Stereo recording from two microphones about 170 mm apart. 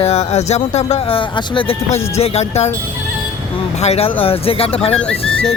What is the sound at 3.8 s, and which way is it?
Speech, 35° left (ahead or behind).